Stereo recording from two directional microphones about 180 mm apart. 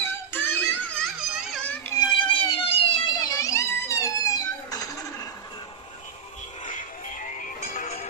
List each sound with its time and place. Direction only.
0.0 s music: 10° left (ahead or behind)
1.0 s children playing: centre (ahead or behind)
2.5 s music: 30° left (ahead or behind)
3.2 s a sound: 20° left (ahead or behind)
6.6 s music: 45° left (ahead or behind)